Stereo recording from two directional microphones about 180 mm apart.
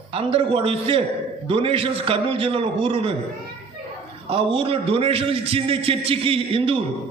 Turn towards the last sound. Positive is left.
turn(degrees=-30)  # may be behind; listen again after turning